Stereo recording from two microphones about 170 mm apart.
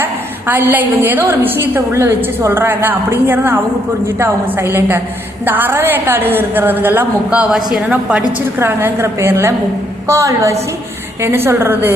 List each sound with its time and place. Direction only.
0.0 s a woman's voice: 10° right (ahead or behind)